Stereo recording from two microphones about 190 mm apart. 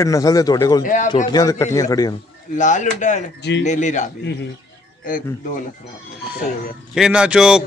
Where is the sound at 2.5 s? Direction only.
40° left (ahead or behind).